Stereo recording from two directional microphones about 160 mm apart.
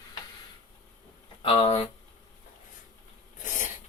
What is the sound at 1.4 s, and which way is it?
Speech, 35° left (ahead or behind).